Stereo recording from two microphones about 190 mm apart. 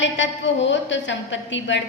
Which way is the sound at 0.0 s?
75° left (ahead or behind).